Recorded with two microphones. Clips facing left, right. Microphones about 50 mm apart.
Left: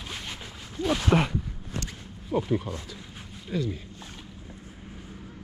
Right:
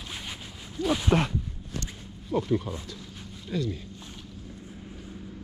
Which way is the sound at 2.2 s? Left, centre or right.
Centre.